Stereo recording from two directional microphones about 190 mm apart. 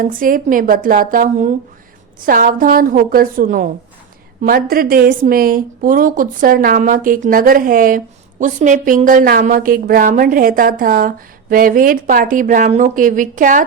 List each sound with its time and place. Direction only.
0.0 s a woman's voice: 45° right (ahead or behind)